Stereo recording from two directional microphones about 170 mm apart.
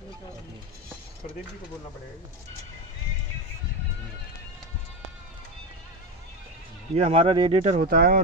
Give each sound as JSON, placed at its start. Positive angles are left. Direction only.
{"t": 6.9, "sound": "speech", "side_deg": -35}
{"t": 7.6, "sound": "speech", "side_deg": -40}
{"t": 7.9, "sound": "speech", "side_deg": -65}